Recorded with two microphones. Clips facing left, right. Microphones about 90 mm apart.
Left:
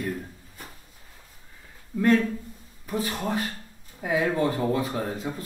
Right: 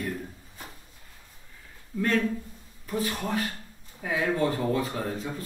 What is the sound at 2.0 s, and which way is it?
Speech, 25° left (ahead or behind).